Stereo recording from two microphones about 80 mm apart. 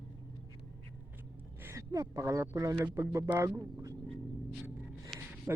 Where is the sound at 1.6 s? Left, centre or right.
Right.